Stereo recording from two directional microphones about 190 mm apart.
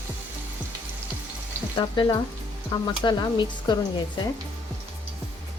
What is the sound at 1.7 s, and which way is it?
Speech, 25° left (ahead or behind).